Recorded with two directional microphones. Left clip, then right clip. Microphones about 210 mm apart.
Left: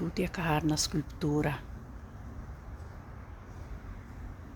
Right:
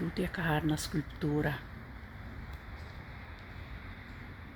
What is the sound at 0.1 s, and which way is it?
A woman's voice, 10° left (ahead or behind).